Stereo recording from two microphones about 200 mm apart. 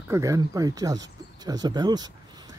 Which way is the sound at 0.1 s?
15° right (ahead or behind).